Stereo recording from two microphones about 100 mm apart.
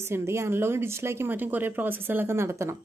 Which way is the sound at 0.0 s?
25° right (ahead or behind).